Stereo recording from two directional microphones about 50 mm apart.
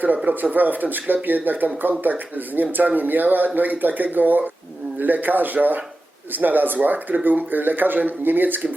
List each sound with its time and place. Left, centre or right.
0.5 s speech: right